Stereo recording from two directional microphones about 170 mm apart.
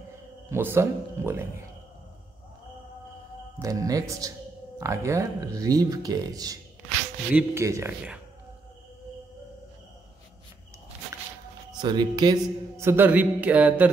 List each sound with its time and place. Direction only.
0.5 s speech: 15° right (ahead or behind)
3.5 s speech: 20° right (ahead or behind)
11.8 s speech: 25° right (ahead or behind); by 13.8 s 10° right (ahead or behind)